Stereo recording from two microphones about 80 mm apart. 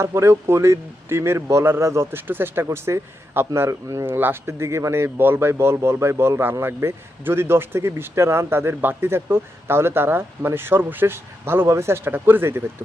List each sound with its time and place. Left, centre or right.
0.0 s a man's voice: right
2.6 s a man's voice: right
4.0 s a man's voice: right